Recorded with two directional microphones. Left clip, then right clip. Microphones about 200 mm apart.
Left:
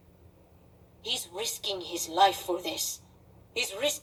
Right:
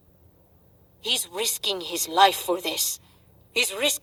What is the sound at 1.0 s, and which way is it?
A woman's voice, 50° right (ahead or behind).